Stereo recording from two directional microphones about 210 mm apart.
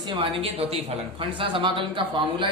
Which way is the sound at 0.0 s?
25° right (ahead or behind).